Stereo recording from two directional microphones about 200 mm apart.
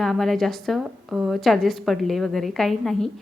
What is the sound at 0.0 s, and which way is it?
Speech, centre (ahead or behind).